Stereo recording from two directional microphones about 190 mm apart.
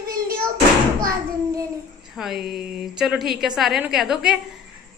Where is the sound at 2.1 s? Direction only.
Centre (ahead or behind).